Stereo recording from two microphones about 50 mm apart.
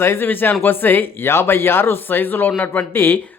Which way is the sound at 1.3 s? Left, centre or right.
Left.